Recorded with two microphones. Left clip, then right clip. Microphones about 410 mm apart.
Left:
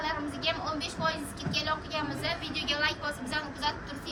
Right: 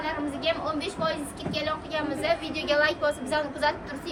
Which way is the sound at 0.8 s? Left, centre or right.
Centre.